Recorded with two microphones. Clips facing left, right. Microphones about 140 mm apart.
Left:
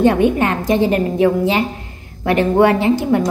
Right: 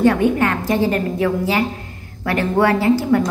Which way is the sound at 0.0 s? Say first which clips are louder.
Left 2 dB; 20° left (ahead or behind).